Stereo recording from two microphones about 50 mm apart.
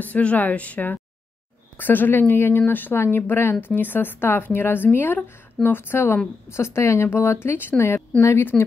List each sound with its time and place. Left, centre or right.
0.0 s a woman's voice: left
6.5 s speech: left
7.1 s a woman's voice: left